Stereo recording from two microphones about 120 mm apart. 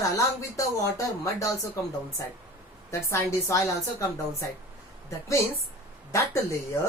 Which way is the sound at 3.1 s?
25° left (ahead or behind).